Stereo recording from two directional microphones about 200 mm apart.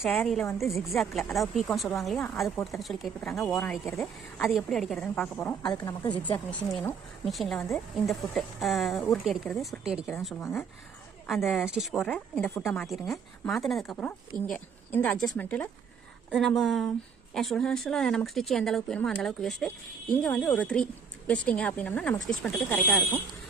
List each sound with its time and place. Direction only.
0.0 s a woman's voice: centre (ahead or behind)
5.6 s a woman's voice: 15° left (ahead or behind)
6.3 s a woman's voice: 10° left (ahead or behind)
10.4 s speech: 10° left (ahead or behind)
11.3 s a woman's voice: centre (ahead or behind)